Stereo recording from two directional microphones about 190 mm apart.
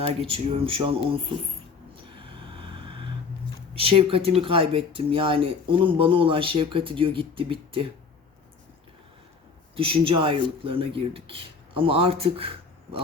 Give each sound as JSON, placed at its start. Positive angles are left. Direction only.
{"t": 0.3, "sound": "speech", "side_deg": -30}
{"t": 2.0, "sound": "a sound", "side_deg": -25}
{"t": 3.8, "sound": "speech", "side_deg": -30}
{"t": 9.7, "sound": "speech", "side_deg": -30}